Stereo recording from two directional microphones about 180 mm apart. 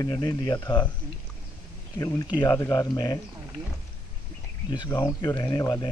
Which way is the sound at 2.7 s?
25° left (ahead or behind).